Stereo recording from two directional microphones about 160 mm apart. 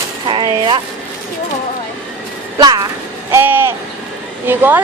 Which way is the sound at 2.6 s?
25° right (ahead or behind).